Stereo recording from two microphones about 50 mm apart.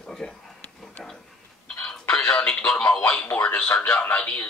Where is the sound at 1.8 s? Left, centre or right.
Centre.